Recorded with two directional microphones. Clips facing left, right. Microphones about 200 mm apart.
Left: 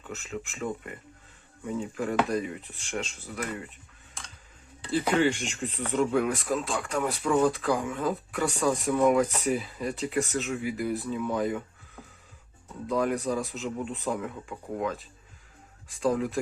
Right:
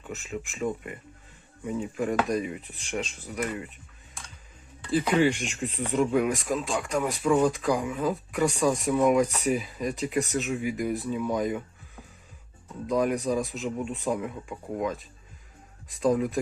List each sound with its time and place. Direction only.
0.2 s speech: 15° right (ahead or behind)
5.2 s speech: 15° right (ahead or behind)
5.7 s speech: 35° right (ahead or behind)
6.0 s speech: 15° right (ahead or behind)
12.9 s speech: 15° right (ahead or behind)
16.0 s speech: 15° right (ahead or behind)